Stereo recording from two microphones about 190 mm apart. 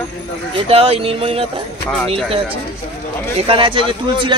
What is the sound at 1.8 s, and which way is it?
Speech, 5° left (ahead or behind).